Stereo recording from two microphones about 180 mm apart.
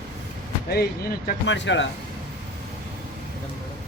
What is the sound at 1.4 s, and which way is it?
Speech, 90° left.